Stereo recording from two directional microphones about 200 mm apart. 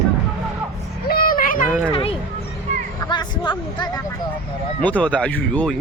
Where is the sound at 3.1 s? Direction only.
20° left (ahead or behind).